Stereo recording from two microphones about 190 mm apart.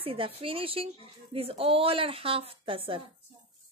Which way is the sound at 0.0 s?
30° right (ahead or behind).